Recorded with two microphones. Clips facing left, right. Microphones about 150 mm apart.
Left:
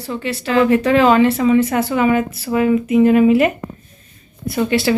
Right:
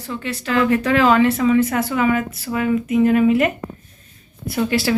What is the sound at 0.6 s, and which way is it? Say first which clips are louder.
A woman's voice: left 3 dB; centre (ahead or behind).